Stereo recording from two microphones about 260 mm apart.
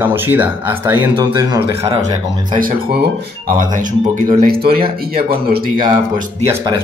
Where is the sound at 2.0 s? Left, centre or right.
Right.